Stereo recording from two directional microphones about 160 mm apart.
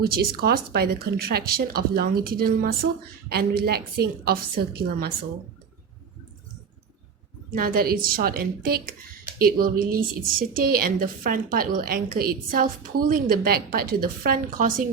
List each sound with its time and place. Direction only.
0.0 s speech: 70° right (ahead or behind)
7.5 s a woman's voice: 65° right (ahead or behind)